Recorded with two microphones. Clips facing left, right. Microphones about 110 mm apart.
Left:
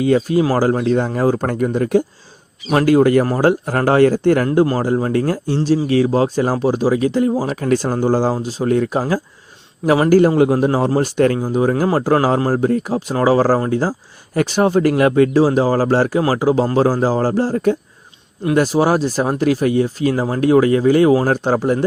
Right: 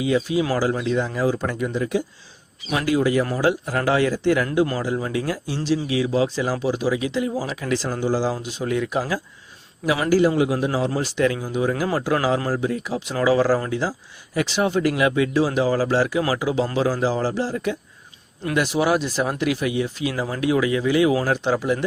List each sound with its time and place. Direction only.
0.0 s a man's voice: 50° left (ahead or behind)
4.4 s a man's voice: 35° left (ahead or behind)